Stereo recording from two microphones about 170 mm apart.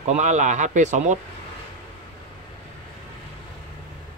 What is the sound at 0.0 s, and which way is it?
Speech, 45° right (ahead or behind).